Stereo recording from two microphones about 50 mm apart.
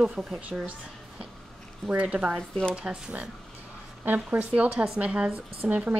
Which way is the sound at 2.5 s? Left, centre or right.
Centre.